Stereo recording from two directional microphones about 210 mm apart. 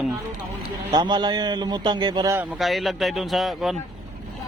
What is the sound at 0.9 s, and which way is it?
A man's voice, 20° right (ahead or behind).